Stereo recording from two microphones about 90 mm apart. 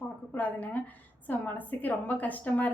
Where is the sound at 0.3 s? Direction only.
15° left (ahead or behind).